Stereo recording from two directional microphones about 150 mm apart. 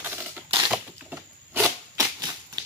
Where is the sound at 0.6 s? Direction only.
10° right (ahead or behind).